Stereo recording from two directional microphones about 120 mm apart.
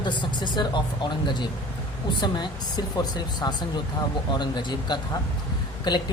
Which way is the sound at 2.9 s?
35° left (ahead or behind).